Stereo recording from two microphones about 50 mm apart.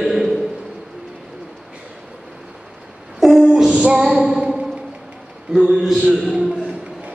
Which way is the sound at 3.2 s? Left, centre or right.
Centre.